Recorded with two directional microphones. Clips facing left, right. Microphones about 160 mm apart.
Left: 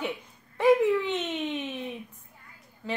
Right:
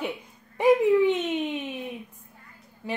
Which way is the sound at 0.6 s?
15° right (ahead or behind).